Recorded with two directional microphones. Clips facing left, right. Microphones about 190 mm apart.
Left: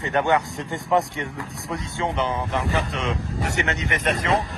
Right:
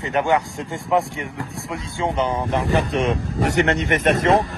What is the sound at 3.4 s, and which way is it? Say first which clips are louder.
Speech: right 10 dB; 55° right (ahead or behind).